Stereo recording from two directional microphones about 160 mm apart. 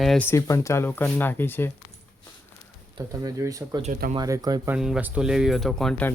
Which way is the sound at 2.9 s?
20° right (ahead or behind).